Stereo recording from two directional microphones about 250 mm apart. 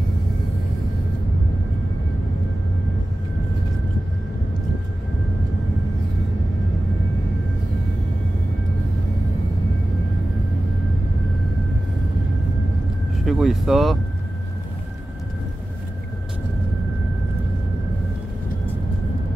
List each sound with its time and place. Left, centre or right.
13.2 s vehicle: centre